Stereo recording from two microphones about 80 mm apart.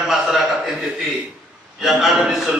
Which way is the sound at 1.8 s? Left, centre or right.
Centre.